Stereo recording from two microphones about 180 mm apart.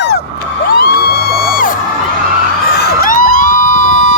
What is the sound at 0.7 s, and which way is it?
Music, 60° left (ahead or behind).